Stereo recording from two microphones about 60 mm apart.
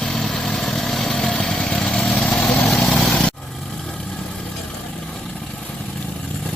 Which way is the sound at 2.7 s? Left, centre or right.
Centre.